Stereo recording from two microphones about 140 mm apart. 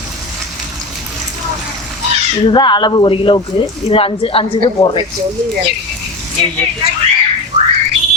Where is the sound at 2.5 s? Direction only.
35° left (ahead or behind).